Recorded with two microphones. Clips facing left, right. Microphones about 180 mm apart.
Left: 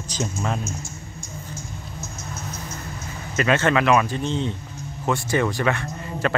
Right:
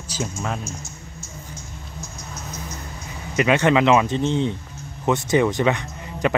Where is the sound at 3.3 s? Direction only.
15° right (ahead or behind).